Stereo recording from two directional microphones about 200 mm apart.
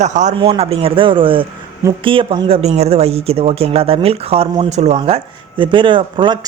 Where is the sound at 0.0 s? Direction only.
35° right (ahead or behind).